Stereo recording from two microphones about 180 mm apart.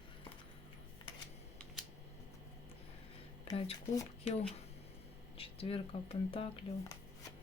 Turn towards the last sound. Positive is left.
turn(degrees=30)  # may be behind; listen again after turning